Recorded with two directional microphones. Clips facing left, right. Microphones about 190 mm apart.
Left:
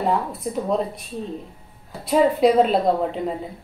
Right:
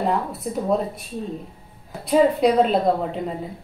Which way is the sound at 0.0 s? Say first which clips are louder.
Left 1 dB; centre (ahead or behind).